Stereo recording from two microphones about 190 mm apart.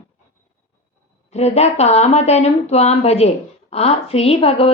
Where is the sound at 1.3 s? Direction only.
35° left (ahead or behind).